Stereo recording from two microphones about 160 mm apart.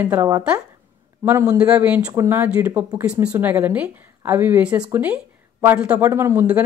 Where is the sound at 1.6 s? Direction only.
10° right (ahead or behind).